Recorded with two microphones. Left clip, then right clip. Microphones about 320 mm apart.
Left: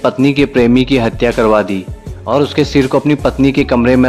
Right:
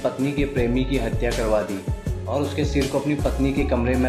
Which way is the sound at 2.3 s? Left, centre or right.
Left.